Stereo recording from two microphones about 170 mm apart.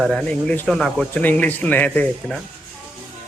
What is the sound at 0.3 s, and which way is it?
Speech, 10° left (ahead or behind).